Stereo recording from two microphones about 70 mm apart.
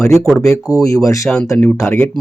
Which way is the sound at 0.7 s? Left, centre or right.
Left.